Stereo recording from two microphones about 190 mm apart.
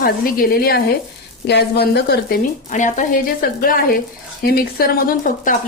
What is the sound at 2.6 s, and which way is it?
Speech, 40° left (ahead or behind).